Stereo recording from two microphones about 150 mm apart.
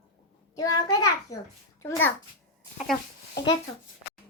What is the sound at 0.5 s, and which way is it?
Speech, 25° left (ahead or behind).